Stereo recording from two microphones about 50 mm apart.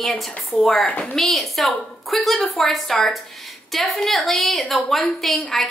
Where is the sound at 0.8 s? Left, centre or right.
Left.